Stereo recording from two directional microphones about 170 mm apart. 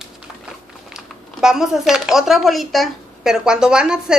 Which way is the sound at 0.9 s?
5° right (ahead or behind).